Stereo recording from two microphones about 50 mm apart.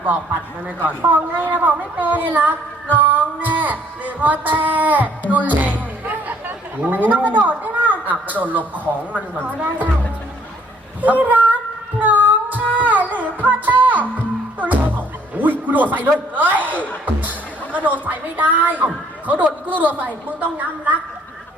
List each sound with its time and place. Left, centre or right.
0.8 s a woman's voice: right
5.3 s music: right
6.8 s a woman's voice: right
11.0 s female singing: right
14.6 s music: right
17.2 s a woman's voice: right